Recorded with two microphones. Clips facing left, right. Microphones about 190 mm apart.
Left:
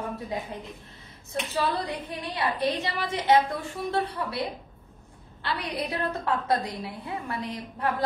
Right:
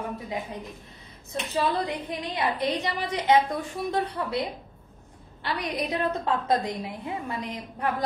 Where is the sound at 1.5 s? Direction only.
15° right (ahead or behind).